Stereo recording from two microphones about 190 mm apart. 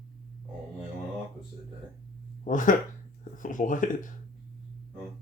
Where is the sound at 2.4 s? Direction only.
45° left (ahead or behind).